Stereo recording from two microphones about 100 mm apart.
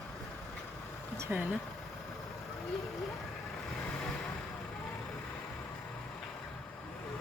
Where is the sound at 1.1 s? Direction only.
25° right (ahead or behind).